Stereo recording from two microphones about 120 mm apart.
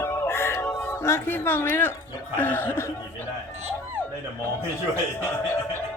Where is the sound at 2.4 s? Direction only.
15° left (ahead or behind).